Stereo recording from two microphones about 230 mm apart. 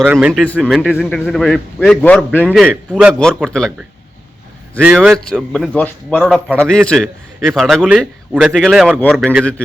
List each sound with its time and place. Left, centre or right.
0.0 s a man's voice: centre
4.8 s a man's voice: centre